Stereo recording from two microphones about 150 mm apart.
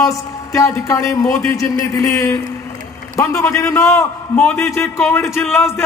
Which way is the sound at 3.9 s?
10° left (ahead or behind).